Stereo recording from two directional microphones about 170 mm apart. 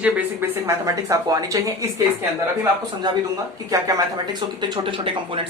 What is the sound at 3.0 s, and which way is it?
Speech, 20° right (ahead or behind).